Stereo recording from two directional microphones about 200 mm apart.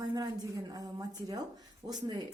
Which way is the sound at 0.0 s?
20° right (ahead or behind).